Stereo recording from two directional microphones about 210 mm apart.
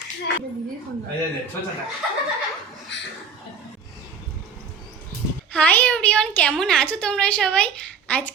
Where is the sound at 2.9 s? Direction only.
55° left (ahead or behind).